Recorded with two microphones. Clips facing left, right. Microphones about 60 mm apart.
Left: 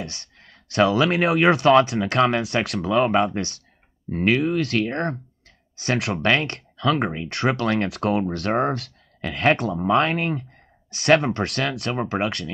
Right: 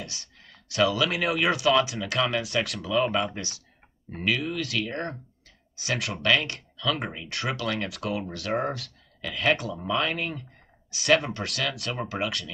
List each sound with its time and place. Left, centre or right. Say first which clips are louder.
0.0 s speech: left 6 dB; left
2.4 s speech: left 4 dB; left
2.8 s speech: left 7 dB; left
6.2 s speech: left 1 dB; left
8.7 s speech: left 8 dB; left
12.0 s speech: left 6 dB; left